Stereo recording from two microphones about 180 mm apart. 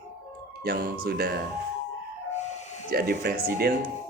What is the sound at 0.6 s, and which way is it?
Speech, 55° right (ahead or behind).